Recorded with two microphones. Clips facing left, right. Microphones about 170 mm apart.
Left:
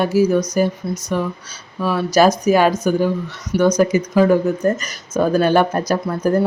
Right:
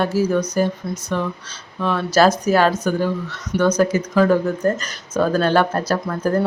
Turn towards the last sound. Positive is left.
turn(degrees=10)  # may be behind; listen again after turning